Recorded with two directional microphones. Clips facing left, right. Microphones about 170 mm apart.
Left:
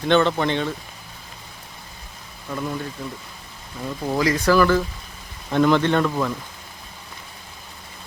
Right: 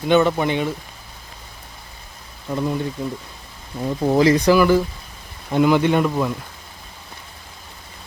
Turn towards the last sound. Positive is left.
turn(degrees=-10)  # may be behind; listen again after turning